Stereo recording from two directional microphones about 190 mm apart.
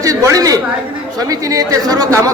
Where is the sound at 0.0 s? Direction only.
15° right (ahead or behind).